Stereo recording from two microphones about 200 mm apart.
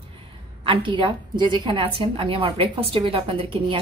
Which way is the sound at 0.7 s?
25° right (ahead or behind).